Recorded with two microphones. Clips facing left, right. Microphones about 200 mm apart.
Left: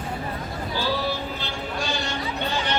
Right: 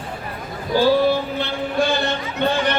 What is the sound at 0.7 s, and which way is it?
Speech, 45° right (ahead or behind).